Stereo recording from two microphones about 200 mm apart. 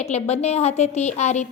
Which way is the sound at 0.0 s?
35° left (ahead or behind).